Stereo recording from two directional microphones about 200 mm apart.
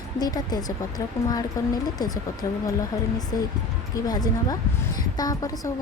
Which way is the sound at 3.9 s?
20° left (ahead or behind).